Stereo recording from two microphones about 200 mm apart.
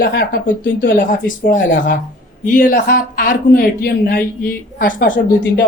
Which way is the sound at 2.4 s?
45° left (ahead or behind).